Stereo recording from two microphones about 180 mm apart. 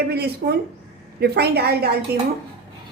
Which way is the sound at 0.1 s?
60° right (ahead or behind).